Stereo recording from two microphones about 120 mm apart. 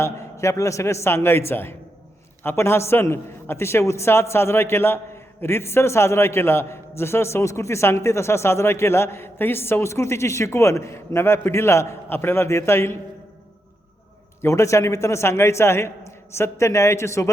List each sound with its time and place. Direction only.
0.0 s a man's voice: 25° left (ahead or behind)
14.4 s a man's voice: 25° left (ahead or behind)